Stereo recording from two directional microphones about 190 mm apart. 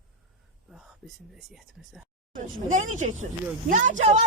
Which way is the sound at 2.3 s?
40° right (ahead or behind).